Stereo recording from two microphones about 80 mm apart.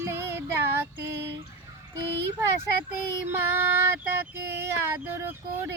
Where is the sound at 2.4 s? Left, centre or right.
Right.